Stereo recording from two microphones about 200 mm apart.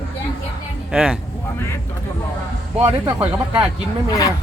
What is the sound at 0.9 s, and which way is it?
Speech, 5° right (ahead or behind).